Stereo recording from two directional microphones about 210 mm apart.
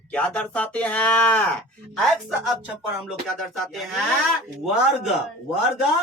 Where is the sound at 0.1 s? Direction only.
5° left (ahead or behind).